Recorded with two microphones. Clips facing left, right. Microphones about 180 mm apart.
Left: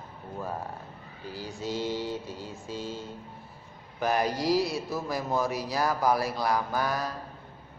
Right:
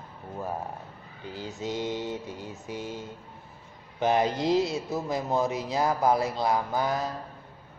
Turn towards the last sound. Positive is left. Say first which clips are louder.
# right 2 dB
turn(degrees=-20)  # may be behind; listen again after turning